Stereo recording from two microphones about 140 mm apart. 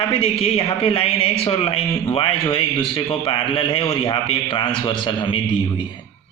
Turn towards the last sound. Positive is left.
turn(degrees=35)  # may be behind; listen again after turning